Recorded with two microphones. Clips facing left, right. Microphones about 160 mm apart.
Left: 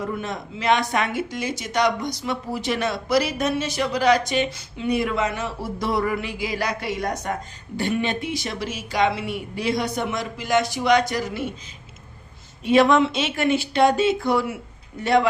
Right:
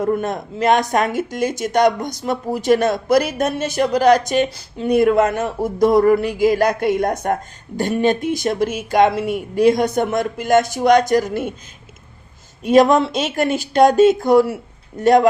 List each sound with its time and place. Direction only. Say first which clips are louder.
0.0 s speech: right 8 dB; 50° right (ahead or behind)
12.6 s speech: right 4 dB; 40° right (ahead or behind)